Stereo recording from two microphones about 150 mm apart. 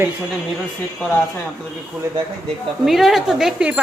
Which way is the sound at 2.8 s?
Centre (ahead or behind).